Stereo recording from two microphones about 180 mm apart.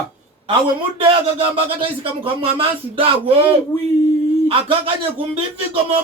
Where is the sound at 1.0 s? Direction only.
30° right (ahead or behind).